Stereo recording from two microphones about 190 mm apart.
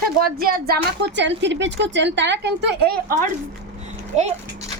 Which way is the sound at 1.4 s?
70° right (ahead or behind).